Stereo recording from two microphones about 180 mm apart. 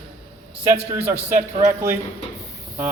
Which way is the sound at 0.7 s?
10° right (ahead or behind).